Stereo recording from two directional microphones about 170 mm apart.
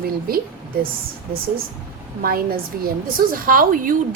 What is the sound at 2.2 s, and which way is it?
A woman's voice, 60° right (ahead or behind).